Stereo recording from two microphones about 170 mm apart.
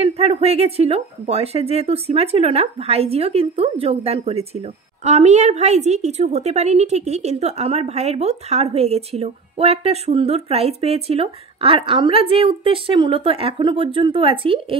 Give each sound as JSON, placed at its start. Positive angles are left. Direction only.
{"t": 0.0, "sound": "speech", "side_deg": -35}